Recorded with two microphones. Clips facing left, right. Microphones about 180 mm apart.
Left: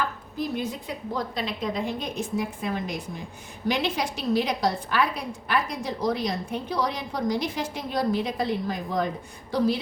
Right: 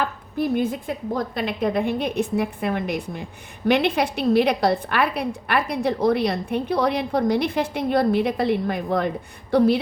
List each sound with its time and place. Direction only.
0.3 s a woman's voice: 55° right (ahead or behind)